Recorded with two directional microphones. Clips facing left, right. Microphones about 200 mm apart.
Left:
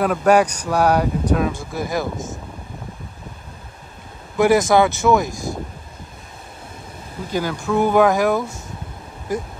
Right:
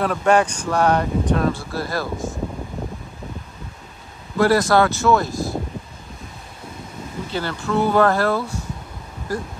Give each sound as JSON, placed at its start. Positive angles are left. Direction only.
{"t": 0.0, "sound": "speech", "side_deg": 5}
{"t": 4.4, "sound": "speech", "side_deg": 20}
{"t": 7.2, "sound": "speech", "side_deg": 10}